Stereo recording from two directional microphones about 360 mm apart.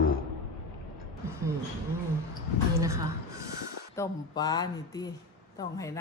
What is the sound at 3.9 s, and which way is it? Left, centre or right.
Speech, centre.